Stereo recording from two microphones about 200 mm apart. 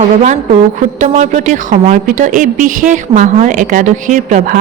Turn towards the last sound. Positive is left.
turn(degrees=-40)  # may be behind; listen again after turning